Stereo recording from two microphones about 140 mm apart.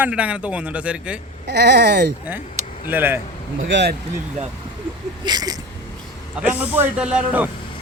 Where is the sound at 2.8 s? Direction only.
15° right (ahead or behind).